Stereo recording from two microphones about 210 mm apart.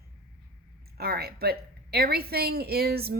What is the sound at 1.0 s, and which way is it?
A woman's voice, 50° right (ahead or behind).